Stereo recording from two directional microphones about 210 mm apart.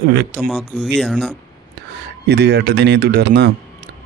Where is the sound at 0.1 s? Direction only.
50° right (ahead or behind).